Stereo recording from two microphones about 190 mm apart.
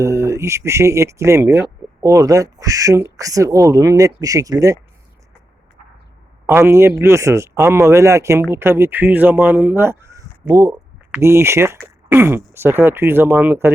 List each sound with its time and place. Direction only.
0.0 s speech: 15° right (ahead or behind)
6.4 s speech: 15° right (ahead or behind)